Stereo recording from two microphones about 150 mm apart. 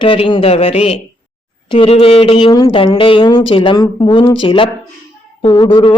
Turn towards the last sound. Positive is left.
turn(degrees=30)  # may be behind; listen again after turning